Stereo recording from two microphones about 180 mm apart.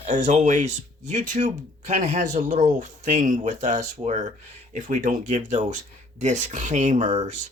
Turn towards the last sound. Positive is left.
turn(degrees=-40)  # may be behind; listen again after turning